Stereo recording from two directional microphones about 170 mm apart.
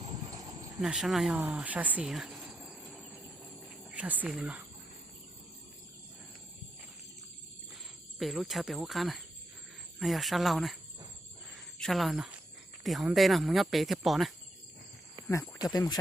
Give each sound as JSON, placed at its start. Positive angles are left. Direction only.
{"t": 0.3, "sound": "cricket", "side_deg": -25}
{"t": 0.8, "sound": "speech", "side_deg": 0}
{"t": 8.2, "sound": "speech", "side_deg": 0}
{"t": 11.5, "sound": "cricket", "side_deg": 0}
{"t": 12.8, "sound": "speech", "side_deg": 0}
{"t": 15.3, "sound": "speech", "side_deg": 20}